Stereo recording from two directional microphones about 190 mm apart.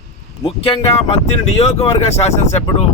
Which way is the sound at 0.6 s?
30° left (ahead or behind).